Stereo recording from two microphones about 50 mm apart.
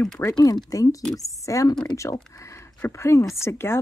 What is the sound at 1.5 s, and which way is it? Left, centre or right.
Speech, left.